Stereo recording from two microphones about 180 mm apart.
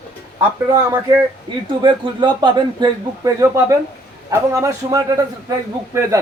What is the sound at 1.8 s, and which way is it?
Speech, 25° right (ahead or behind).